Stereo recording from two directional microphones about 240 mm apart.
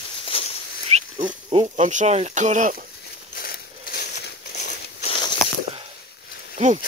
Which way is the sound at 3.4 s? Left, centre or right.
Left.